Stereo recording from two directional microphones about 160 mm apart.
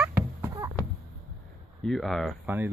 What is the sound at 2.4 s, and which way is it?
Speech, 15° right (ahead or behind).